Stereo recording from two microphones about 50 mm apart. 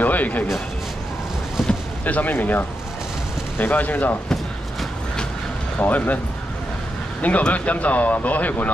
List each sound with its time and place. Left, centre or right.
0.0 s a sound: left
1.6 s boat: centre
2.0 s speech: left
5.8 s speech: left
7.2 s speech: left